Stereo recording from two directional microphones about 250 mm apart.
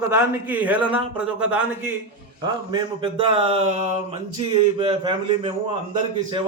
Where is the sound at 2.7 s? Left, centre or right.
Right.